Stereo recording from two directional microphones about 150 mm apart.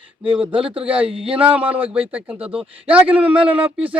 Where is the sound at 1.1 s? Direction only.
40° right (ahead or behind).